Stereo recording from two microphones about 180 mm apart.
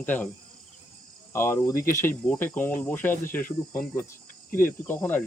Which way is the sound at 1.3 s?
15° left (ahead or behind).